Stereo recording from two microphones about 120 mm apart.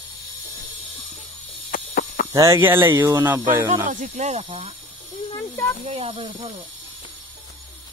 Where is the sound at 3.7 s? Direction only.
85° right; by 4.5 s 65° right (ahead or behind).